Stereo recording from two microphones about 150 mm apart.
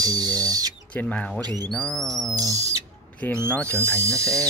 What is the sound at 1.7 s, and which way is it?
Music, centre (ahead or behind).